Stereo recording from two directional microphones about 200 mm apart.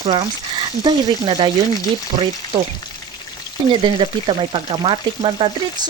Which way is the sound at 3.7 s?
25° right (ahead or behind).